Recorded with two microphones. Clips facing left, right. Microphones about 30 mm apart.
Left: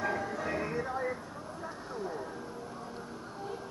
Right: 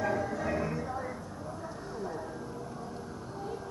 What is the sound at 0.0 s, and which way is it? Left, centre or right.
Music, centre.